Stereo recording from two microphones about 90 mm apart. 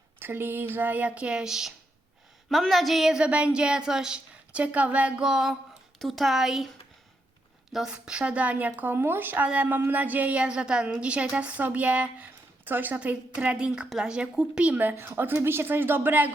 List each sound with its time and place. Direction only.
0.2 s a woman's voice: 25° right (ahead or behind); by 6.7 s 5° right (ahead or behind)
7.7 s a woman's voice: 5° right (ahead or behind); by 16.3 s 20° right (ahead or behind)